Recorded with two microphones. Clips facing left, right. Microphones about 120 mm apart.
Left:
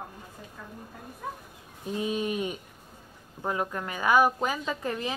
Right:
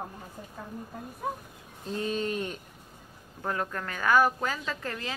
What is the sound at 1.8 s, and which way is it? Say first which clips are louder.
A woman's voice: left 1 dB; 10° left (ahead or behind).